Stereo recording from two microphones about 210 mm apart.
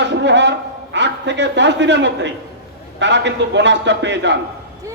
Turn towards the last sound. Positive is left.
turn(degrees=-55)  # may be behind; listen again after turning